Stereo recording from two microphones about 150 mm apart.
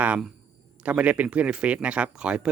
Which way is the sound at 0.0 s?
10° right (ahead or behind).